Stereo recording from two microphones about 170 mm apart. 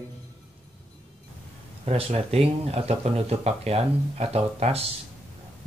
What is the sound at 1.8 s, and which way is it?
Speech, 35° right (ahead or behind).